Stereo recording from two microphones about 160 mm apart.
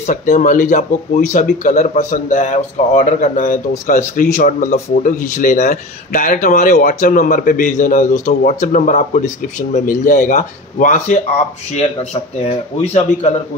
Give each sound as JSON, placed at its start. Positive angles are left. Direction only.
{"t": 0.0, "sound": "speech", "side_deg": 55}